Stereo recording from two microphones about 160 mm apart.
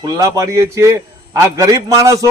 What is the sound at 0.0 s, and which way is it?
Speech, 20° right (ahead or behind).